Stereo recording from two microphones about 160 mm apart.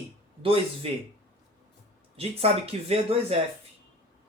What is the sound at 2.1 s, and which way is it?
Speech, 40° right (ahead or behind).